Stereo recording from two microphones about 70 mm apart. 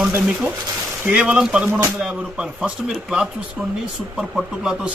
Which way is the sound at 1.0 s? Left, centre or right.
Centre.